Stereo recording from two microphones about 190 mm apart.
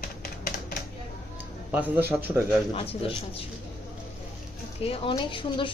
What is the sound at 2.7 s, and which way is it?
Speech, 30° left (ahead or behind).